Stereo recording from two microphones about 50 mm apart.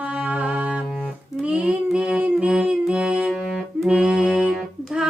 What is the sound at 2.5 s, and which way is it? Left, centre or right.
Music, centre.